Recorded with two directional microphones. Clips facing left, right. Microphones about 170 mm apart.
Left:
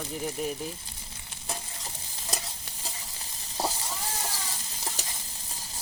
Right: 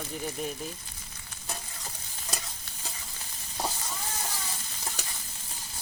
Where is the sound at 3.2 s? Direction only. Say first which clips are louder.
Left 3 dB; 35° left (ahead or behind).